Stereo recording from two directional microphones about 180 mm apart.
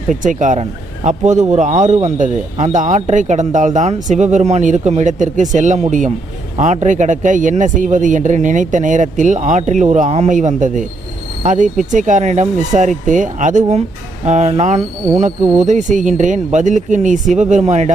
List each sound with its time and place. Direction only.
0.1 s speech: 45° right (ahead or behind)